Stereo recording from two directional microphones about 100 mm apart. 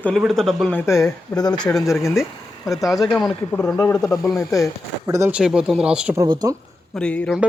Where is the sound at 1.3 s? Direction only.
40° left (ahead or behind).